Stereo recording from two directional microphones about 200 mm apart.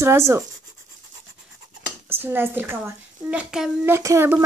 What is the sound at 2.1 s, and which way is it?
A child's voice, 10° right (ahead or behind).